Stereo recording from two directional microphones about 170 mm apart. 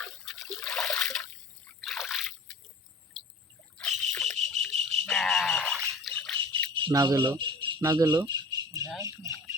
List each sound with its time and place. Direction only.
0.3 s trickle: 5° left (ahead or behind)
3.8 s a sound: 5° left (ahead or behind)
4.7 s rattle: 35° right (ahead or behind)
5.0 s a sound: 5° left (ahead or behind)
6.7 s cricket: 25° right (ahead or behind)
9.0 s speech: 15° right (ahead or behind)